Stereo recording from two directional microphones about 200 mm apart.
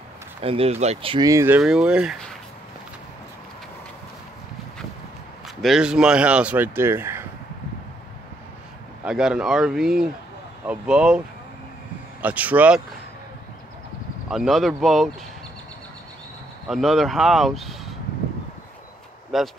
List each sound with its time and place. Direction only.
0.4 s speech: 30° right (ahead or behind); by 2.3 s centre (ahead or behind)
5.6 s speech: centre (ahead or behind)
9.0 s speech: 5° right (ahead or behind)
14.3 s speech: centre (ahead or behind)
16.6 s speech: centre (ahead or behind)
19.3 s speech: centre (ahead or behind)